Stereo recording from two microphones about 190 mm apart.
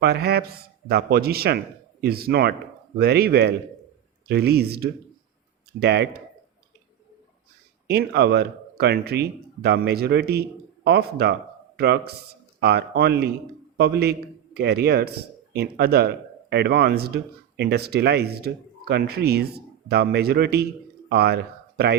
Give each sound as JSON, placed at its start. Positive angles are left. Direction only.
{"t": 0.0, "sound": "speech", "side_deg": -60}
{"t": 7.9, "sound": "speech", "side_deg": -60}